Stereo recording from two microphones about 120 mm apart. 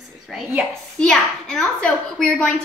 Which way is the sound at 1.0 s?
5° left (ahead or behind).